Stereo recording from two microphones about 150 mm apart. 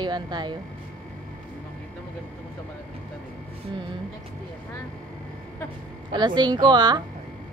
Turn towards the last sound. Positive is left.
turn(degrees=-30)  # may be behind; listen again after turning